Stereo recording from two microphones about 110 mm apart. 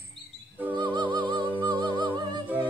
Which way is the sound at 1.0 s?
40° right (ahead or behind).